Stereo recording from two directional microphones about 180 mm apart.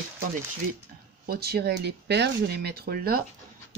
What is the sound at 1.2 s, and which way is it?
Speech, 60° right (ahead or behind).